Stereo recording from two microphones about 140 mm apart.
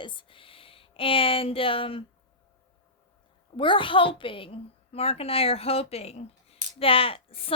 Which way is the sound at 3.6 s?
35° left (ahead or behind).